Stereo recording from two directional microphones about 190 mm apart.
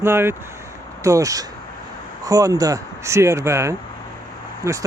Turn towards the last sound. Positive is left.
turn(degrees=-15)  # may be behind; listen again after turning